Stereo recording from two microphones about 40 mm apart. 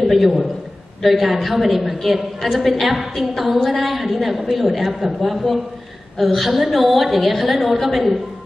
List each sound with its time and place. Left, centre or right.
0.0 s a man's voice: centre